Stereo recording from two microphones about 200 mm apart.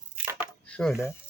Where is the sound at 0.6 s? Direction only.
5° left (ahead or behind).